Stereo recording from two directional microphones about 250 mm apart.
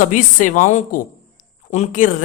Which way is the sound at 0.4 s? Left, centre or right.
Left.